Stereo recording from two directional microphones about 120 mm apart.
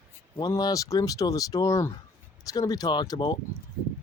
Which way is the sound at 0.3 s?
30° left (ahead or behind).